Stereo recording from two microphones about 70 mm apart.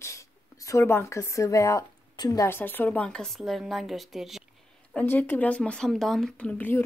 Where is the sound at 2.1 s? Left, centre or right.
Left.